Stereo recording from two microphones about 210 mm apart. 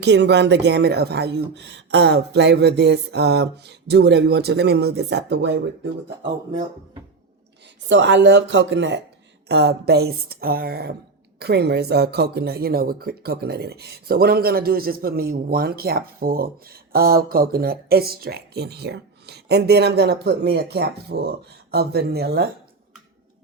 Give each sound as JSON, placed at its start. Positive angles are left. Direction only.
{"t": 0.0, "sound": "a woman's voice", "side_deg": -55}
{"t": 7.9, "sound": "a woman's voice", "side_deg": -60}